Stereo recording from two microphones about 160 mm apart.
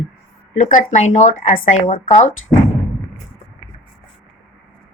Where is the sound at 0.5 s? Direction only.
50° left (ahead or behind).